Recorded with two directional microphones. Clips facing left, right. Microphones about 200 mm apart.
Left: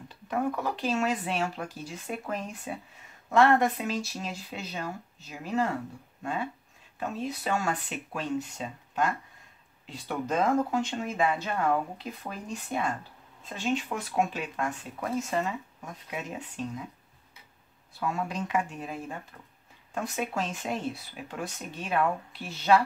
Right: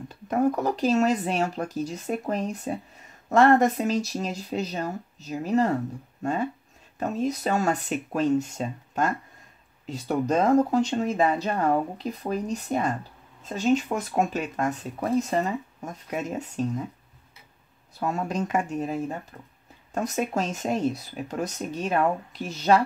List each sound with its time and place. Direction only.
0.1 s speech: 40° right (ahead or behind)
17.9 s speech: 40° right (ahead or behind)